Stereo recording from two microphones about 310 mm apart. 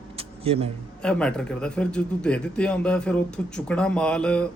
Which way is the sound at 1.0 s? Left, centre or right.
Centre.